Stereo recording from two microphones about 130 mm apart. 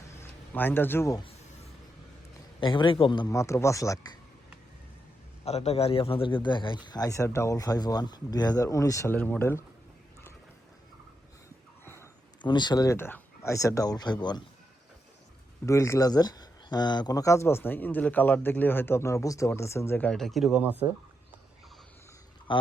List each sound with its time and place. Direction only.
0.2 s a sound: 15° left (ahead or behind)
2.6 s speech: 40° left (ahead or behind)
3.3 s speech: 20° left (ahead or behind)
5.5 s speech: 55° left (ahead or behind); by 9.6 s 20° left (ahead or behind)
12.4 s speech: 35° left (ahead or behind)
15.6 s speech: 20° left (ahead or behind)
20.1 s speech: 5° left (ahead or behind)
20.6 s speech: 10° right (ahead or behind)